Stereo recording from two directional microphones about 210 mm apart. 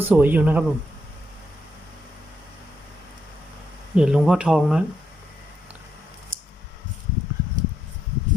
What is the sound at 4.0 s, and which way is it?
Speech, 5° right (ahead or behind).